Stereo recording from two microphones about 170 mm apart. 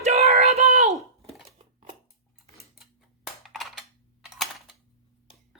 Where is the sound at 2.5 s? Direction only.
Centre (ahead or behind).